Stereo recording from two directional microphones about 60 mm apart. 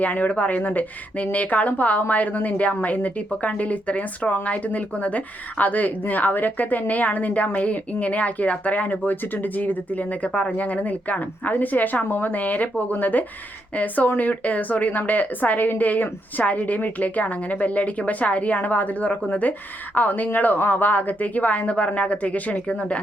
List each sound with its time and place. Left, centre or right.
0.0 s speech: left